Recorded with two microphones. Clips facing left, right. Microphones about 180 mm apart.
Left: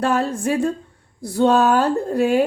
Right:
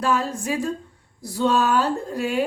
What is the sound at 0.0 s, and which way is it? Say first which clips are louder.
Speech: left 4 dB; 55° left (ahead or behind).